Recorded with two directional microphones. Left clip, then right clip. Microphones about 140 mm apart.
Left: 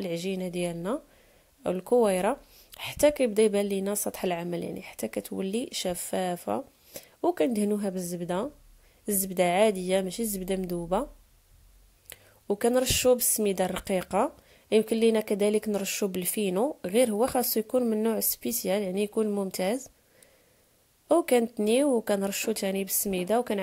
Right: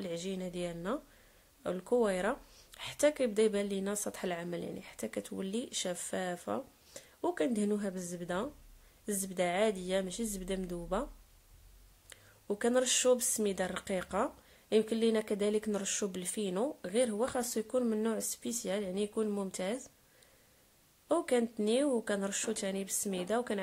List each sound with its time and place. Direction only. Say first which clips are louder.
0.0 s speech: left 7 dB; 40° left (ahead or behind)
12.1 s speech: left 8 dB; 40° left (ahead or behind)
21.1 s a woman's voice: left 8 dB; 45° left (ahead or behind)